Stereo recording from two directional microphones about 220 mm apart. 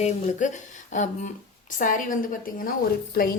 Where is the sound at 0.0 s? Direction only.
35° left (ahead or behind).